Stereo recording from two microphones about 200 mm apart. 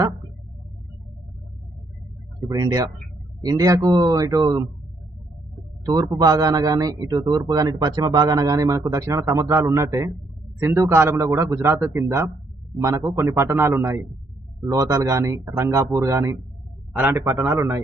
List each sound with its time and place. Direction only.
2.5 s a man's voice: 20° right (ahead or behind)
5.8 s a man's voice: 20° right (ahead or behind)